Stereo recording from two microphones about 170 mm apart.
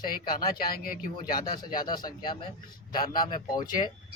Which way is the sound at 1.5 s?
25° left (ahead or behind).